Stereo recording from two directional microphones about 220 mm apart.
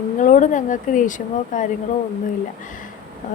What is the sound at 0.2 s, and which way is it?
Speech, 35° left (ahead or behind).